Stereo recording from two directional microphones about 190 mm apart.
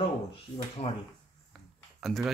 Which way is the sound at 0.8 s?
35° left (ahead or behind).